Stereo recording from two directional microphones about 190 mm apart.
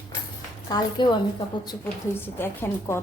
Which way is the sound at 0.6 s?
20° left (ahead or behind).